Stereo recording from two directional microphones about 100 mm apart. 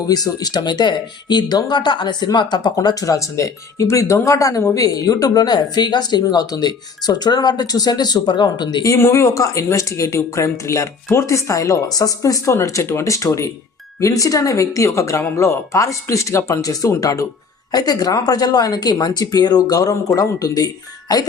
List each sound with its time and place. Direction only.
0.1 s speech: 40° left (ahead or behind)
2.7 s speech: 35° left (ahead or behind)
8.8 s speech: 30° left (ahead or behind)